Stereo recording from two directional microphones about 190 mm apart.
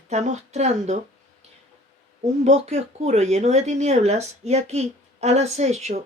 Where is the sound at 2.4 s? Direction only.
35° right (ahead or behind).